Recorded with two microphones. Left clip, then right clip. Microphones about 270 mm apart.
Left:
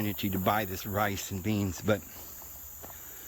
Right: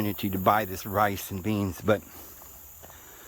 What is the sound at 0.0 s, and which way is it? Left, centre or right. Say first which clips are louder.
Speech: right 5 dB; centre.